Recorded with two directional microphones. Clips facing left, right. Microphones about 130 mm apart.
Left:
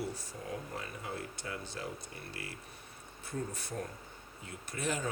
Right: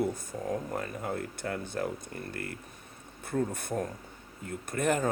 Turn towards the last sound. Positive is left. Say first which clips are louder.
# right 8 dB
turn(degrees=-55)  # may be behind; listen again after turning